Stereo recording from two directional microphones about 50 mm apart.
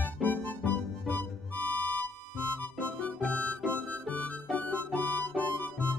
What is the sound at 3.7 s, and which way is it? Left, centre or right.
Music, left.